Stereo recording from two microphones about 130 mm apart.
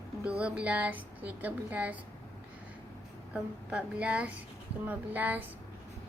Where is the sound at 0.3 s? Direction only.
10° right (ahead or behind).